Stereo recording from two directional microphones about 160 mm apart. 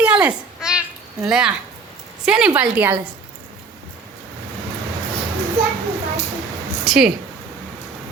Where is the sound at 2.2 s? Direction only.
5° right (ahead or behind).